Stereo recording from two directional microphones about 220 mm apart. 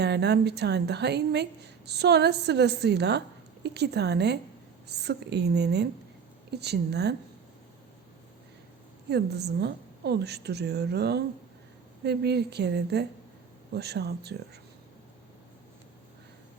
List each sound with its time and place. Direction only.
0.0 s a woman's voice: 50° right (ahead or behind)
9.0 s a woman's voice: 50° right (ahead or behind)